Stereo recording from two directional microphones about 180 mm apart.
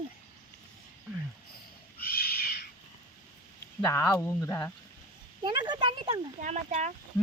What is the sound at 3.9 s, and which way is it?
Speech, 15° left (ahead or behind).